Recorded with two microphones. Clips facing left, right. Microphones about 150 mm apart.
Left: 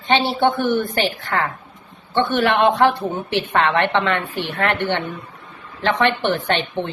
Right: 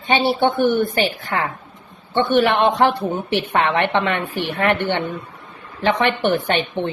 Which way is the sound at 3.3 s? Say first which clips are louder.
Left 1 dB; 15° right (ahead or behind).